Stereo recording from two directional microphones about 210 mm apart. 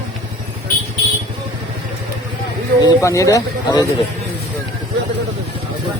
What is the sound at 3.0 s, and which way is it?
Speech, 15° left (ahead or behind).